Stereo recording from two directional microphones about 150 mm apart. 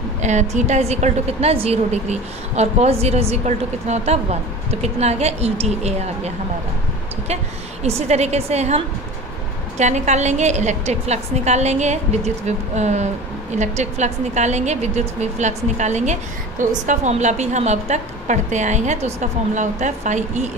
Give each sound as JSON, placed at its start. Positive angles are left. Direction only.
{"t": 0.2, "sound": "a woman's voice", "side_deg": -50}
{"t": 7.8, "sound": "a woman's voice", "side_deg": -45}